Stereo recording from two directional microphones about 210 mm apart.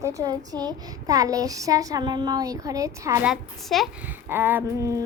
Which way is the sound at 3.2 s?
Centre (ahead or behind).